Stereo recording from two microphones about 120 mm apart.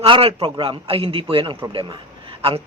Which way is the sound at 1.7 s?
45° right (ahead or behind).